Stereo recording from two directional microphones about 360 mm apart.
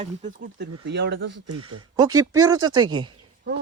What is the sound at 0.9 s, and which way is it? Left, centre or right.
Speech, right.